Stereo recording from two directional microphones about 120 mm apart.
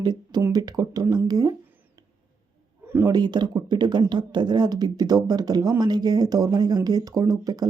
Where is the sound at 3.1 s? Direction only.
35° right (ahead or behind).